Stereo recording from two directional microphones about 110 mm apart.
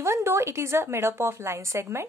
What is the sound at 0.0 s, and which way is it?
Speech, 25° right (ahead or behind).